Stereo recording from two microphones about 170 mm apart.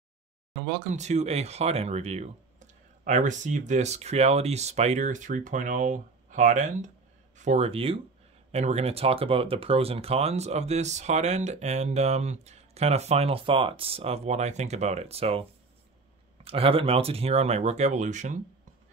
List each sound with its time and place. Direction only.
0.9 s speech: 40° right (ahead or behind)
16.4 s speech: 35° right (ahead or behind)